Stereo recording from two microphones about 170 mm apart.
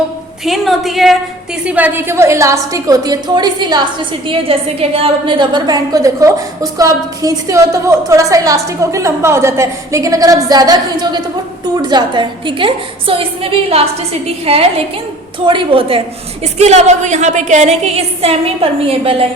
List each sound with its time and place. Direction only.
0.4 s a woman's voice: centre (ahead or behind); by 19.2 s 35° right (ahead or behind)